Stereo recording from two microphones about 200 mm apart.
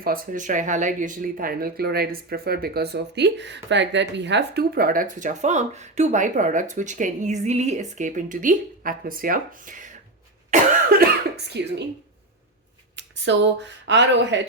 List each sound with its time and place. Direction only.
0.0 s speech: 45° right (ahead or behind)
10.5 s cough: 45° right (ahead or behind)
13.0 s a sound: 65° right (ahead or behind)
13.8 s speech: 60° right (ahead or behind)